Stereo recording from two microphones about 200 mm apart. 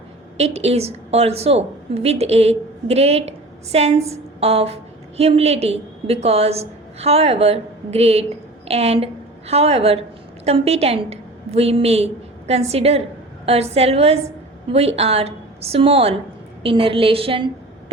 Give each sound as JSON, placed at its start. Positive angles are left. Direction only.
{"t": 0.3, "sound": "a woman's voice", "side_deg": -30}